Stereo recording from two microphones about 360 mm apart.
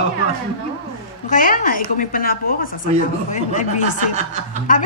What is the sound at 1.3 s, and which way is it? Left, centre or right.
A woman's voice, left.